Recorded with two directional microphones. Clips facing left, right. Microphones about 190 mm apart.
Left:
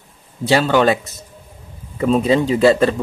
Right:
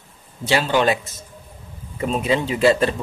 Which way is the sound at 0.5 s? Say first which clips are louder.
Left 4 dB; 45° left (ahead or behind).